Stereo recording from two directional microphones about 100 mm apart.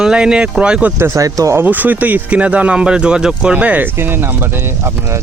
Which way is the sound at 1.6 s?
15° right (ahead or behind).